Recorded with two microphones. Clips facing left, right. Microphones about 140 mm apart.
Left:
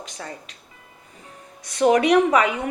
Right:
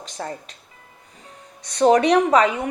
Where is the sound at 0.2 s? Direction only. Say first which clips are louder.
Right 6 dB; 40° right (ahead or behind).